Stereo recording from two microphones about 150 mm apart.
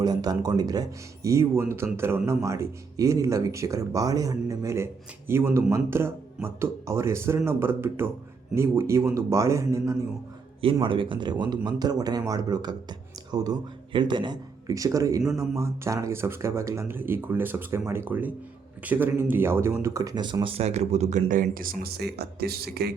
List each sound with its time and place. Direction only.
0.0 s speech: 25° right (ahead or behind)
10.6 s speech: 35° right (ahead or behind); by 22.9 s 90° right